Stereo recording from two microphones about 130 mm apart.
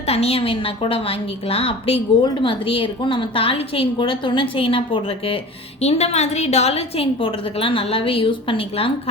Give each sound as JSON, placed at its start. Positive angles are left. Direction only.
{"t": 0.1, "sound": "a woman's voice", "side_deg": 50}
{"t": 5.8, "sound": "a woman's voice", "side_deg": 55}